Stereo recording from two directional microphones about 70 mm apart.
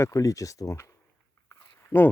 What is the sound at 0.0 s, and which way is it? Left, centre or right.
Speech, left.